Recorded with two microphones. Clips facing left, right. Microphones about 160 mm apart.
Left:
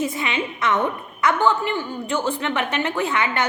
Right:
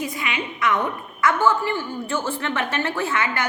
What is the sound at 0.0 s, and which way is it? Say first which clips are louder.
A woman's voice: left 3 dB; 25° left (ahead or behind).